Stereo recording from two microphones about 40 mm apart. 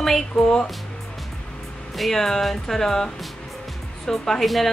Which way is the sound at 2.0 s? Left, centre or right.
Centre.